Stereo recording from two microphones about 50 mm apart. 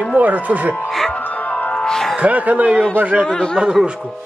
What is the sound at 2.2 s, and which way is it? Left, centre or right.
A man's voice, right.